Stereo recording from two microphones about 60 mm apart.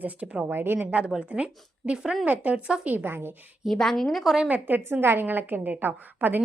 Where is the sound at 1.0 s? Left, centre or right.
Centre; by 3.3 s right.